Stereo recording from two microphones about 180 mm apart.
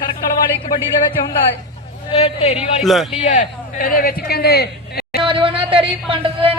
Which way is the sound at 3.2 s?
45° left (ahead or behind).